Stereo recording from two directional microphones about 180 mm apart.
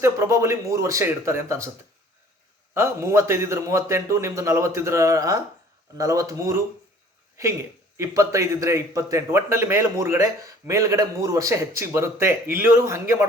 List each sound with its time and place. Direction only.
0.0 s a man's voice: 15° right (ahead or behind)
2.7 s a man's voice: 15° right (ahead or behind)
7.9 s a man's voice: 15° right (ahead or behind)